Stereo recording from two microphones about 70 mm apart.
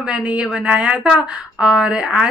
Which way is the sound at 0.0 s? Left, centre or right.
Centre.